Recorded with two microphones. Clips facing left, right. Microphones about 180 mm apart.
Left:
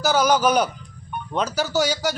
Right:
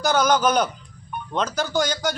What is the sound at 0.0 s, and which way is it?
A man's voice, 5° left (ahead or behind).